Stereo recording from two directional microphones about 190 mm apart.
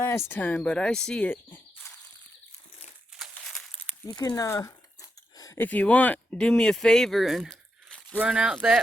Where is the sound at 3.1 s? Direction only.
Centre (ahead or behind).